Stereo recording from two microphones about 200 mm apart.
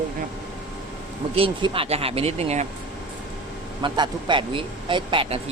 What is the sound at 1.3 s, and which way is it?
Speech, 25° right (ahead or behind).